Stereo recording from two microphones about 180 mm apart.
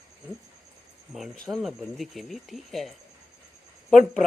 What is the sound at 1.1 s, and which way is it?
Speech, centre (ahead or behind).